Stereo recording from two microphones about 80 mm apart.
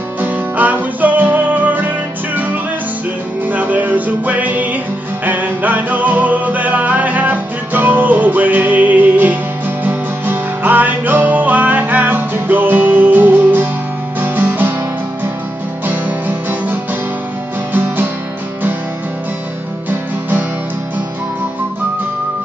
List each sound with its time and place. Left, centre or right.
0.2 s music: right
15.9 s music: right
17.7 s music: right
19.9 s music: right